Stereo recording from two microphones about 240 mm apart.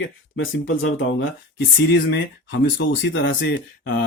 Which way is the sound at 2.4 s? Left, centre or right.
Left.